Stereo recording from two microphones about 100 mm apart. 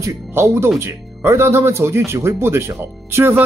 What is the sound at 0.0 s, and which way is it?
Speech, 25° right (ahead or behind).